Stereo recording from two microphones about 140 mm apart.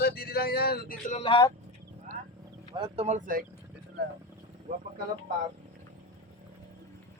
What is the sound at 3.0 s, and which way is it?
Speech, 65° right (ahead or behind).